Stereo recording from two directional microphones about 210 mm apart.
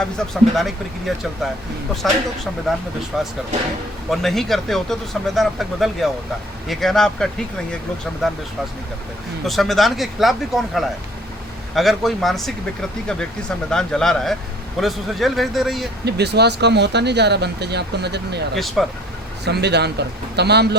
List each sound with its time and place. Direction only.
0.5 s speech: centre (ahead or behind)
9.4 s speech: centre (ahead or behind)
13.7 s speech: 5° left (ahead or behind)
16.0 s speech: 50° right (ahead or behind)
18.5 s speech: centre (ahead or behind)
19.5 s speech: 50° right (ahead or behind)